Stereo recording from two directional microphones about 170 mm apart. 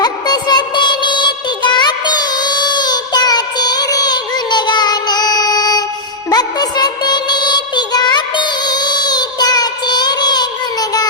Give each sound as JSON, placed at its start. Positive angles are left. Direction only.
{"t": 0.0, "sound": "music", "side_deg": 25}